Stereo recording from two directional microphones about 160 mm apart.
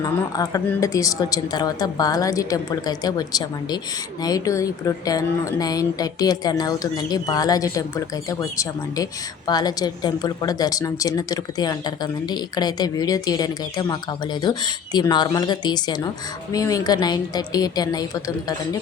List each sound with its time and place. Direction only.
0.0 s a woman's voice: 20° left (ahead or behind)